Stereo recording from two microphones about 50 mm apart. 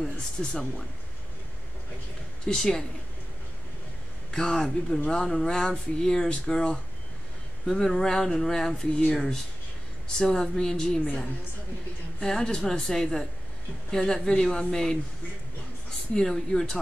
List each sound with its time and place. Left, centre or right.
0.0 s speech: centre
2.4 s speech: centre
4.3 s speech: centre
7.6 s speech: centre
12.2 s speech: centre
16.2 s speech: centre